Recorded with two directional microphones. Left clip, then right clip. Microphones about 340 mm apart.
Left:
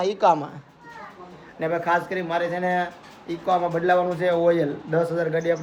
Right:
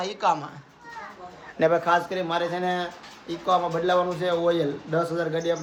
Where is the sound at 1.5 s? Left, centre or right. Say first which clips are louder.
Right 5 dB; right.